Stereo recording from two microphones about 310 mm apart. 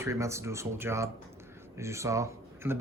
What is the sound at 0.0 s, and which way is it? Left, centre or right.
Speech, centre.